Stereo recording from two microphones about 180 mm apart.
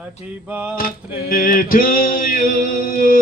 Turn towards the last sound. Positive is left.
turn(degrees=50)  # may be behind; listen again after turning